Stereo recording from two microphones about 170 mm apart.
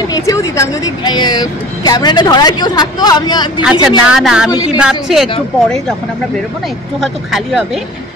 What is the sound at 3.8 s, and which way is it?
Speech, 5° right (ahead or behind).